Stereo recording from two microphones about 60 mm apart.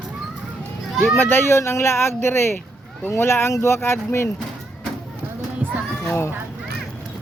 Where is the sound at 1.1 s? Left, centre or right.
Left.